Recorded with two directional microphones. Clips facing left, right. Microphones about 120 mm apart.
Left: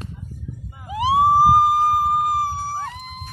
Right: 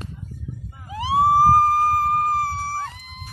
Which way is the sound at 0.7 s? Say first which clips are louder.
Left 4 dB; 10° left (ahead or behind).